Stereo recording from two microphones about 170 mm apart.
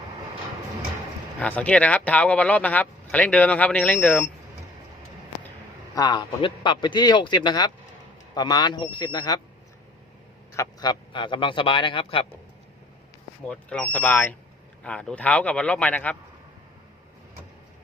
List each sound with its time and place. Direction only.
1.4 s speech: 10° left (ahead or behind)
5.9 s a man's voice: 20° left (ahead or behind)
10.5 s a man's voice: 20° left (ahead or behind)
13.5 s speech: 5° left (ahead or behind)